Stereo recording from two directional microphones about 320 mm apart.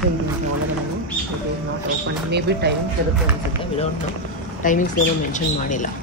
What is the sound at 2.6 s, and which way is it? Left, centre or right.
Speech, right.